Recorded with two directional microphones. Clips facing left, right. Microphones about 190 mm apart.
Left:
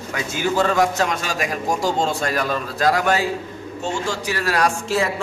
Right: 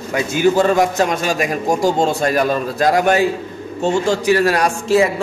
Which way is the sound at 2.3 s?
15° right (ahead or behind).